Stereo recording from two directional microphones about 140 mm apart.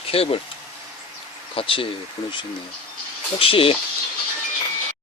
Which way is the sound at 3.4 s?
40° left (ahead or behind).